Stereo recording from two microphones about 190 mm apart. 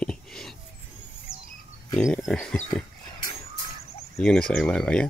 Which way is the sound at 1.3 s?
30° left (ahead or behind).